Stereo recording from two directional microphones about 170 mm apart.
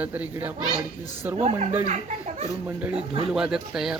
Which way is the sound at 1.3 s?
40° right (ahead or behind).